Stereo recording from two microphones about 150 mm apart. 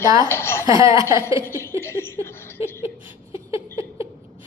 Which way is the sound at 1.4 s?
15° left (ahead or behind).